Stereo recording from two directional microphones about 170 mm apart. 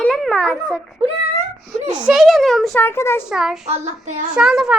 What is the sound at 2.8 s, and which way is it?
Child singing, 15° left (ahead or behind).